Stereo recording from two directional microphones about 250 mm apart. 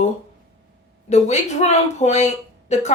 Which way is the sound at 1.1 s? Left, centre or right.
Left.